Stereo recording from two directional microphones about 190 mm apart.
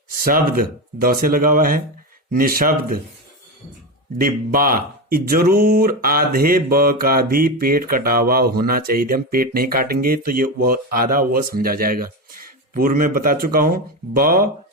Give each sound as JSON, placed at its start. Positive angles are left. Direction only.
{"t": 0.3, "sound": "speech", "side_deg": -50}
{"t": 4.2, "sound": "speech", "side_deg": -50}